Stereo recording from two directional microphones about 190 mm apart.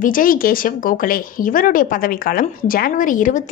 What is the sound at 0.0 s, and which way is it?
A woman's voice, 45° left (ahead or behind).